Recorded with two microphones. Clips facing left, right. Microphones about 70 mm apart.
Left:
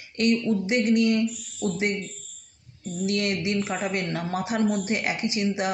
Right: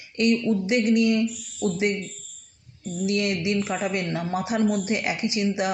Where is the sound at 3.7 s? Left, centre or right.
Left.